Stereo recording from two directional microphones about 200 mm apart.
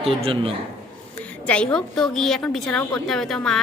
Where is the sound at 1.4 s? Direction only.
5° left (ahead or behind).